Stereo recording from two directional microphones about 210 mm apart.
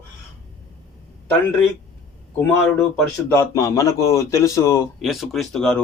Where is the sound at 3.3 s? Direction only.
15° left (ahead or behind).